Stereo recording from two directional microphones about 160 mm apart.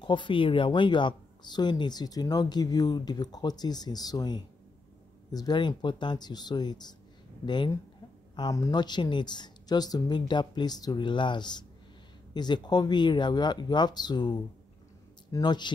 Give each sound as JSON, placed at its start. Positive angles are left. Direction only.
{"t": 0.0, "sound": "speech", "side_deg": 30}